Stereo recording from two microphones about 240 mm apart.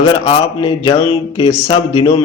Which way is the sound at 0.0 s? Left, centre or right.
Centre.